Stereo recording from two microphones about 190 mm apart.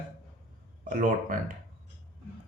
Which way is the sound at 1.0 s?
45° right (ahead or behind).